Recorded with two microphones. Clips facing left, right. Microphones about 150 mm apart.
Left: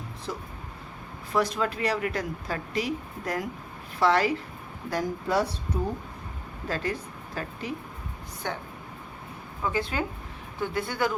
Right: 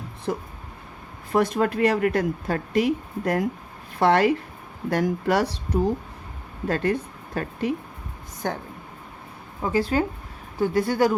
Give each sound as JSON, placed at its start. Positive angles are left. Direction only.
{"t": 0.3, "sound": "speech", "side_deg": -50}
{"t": 4.9, "sound": "speech", "side_deg": -70}
{"t": 6.7, "sound": "a woman's voice", "side_deg": -55}
{"t": 8.4, "sound": "speech", "side_deg": -45}
{"t": 9.6, "sound": "speech", "side_deg": -35}